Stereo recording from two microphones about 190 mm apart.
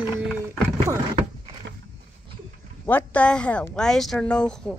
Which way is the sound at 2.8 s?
10° left (ahead or behind).